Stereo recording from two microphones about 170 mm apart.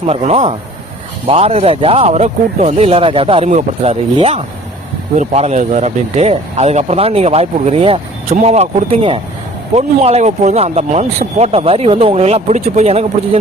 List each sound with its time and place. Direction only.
0.1 s speech: 35° right (ahead or behind)